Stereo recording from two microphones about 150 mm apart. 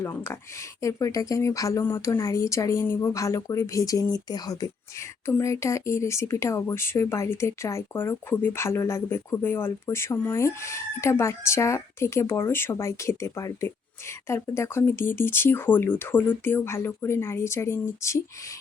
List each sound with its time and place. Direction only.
0.0 s speech: 20° left (ahead or behind)